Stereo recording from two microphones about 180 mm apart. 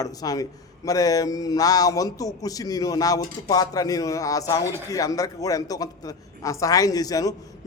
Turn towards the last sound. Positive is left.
turn(degrees=20)  # may be behind; listen again after turning